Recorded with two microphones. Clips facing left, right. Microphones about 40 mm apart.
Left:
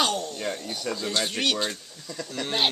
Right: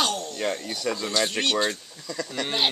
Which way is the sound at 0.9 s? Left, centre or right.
Right.